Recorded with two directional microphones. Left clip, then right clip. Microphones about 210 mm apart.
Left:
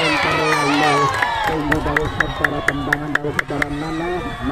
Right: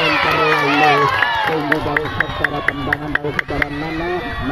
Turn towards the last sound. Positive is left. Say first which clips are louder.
# right 1 dB
turn(degrees=-20)  # may be behind; listen again after turning